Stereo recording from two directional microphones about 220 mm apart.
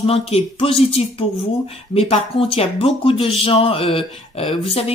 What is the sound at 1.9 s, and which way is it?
Speech, 25° left (ahead or behind).